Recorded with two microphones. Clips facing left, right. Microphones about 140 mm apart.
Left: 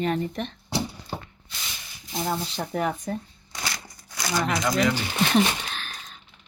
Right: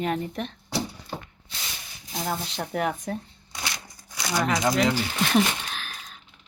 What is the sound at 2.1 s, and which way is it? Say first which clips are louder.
Speech: left 2 dB; centre (ahead or behind).